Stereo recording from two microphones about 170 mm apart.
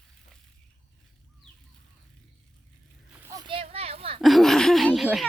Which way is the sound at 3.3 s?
25° right (ahead or behind).